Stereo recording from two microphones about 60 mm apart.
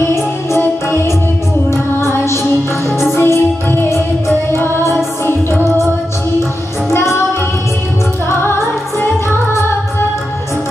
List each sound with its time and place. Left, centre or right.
0.6 s music: left
6.9 s music: left
9.5 s music: left